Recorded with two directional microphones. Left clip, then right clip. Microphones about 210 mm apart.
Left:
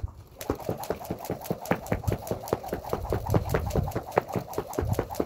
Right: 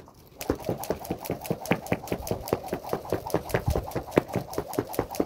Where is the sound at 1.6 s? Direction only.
5° right (ahead or behind).